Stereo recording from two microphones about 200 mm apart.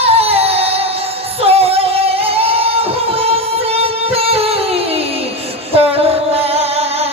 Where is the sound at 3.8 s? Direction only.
30° right (ahead or behind).